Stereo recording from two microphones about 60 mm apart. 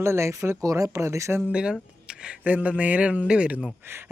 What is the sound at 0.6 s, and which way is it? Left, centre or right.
Speech, right.